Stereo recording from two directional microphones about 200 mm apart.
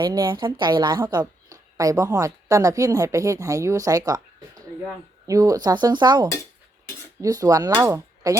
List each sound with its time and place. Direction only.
0.0 s speech: 20° right (ahead or behind)